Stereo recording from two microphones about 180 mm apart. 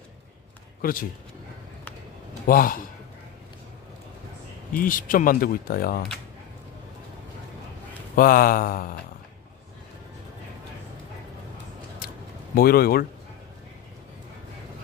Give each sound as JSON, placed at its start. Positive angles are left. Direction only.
{"t": 0.8, "sound": "a man's voice", "side_deg": 50}
{"t": 2.5, "sound": "speech", "side_deg": 55}
{"t": 4.7, "sound": "speech", "side_deg": 50}
{"t": 8.1, "sound": "speech", "side_deg": 50}
{"t": 12.0, "sound": "a sound", "side_deg": 55}
{"t": 12.5, "sound": "speech", "side_deg": 55}